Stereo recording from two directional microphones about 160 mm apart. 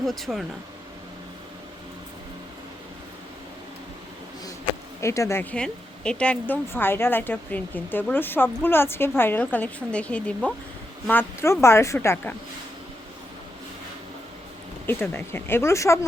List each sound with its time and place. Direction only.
0.0 s speech: centre (ahead or behind)
4.9 s speech: 20° left (ahead or behind)
14.8 s speech: 15° left (ahead or behind)